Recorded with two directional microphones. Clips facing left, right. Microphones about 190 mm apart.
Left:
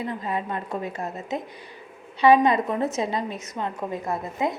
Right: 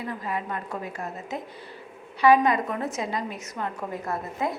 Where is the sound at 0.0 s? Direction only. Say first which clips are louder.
Left 3 dB; 25° left (ahead or behind).